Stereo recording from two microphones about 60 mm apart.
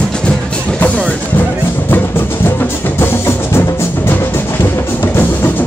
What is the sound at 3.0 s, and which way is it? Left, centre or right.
Music, left.